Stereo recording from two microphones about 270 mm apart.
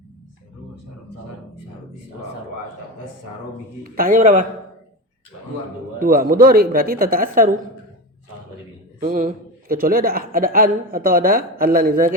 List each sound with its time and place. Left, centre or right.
3.8 s speech: right
6.0 s a man's voice: right
9.0 s a man's voice: right